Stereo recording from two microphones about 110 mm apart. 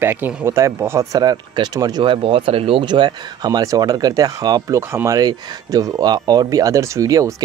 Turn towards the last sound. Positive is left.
turn(degrees=-30)  # may be behind; listen again after turning